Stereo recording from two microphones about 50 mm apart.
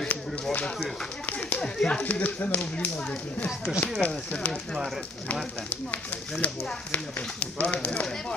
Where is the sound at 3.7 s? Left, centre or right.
Centre.